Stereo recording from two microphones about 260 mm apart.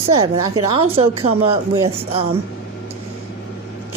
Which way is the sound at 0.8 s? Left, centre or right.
Right.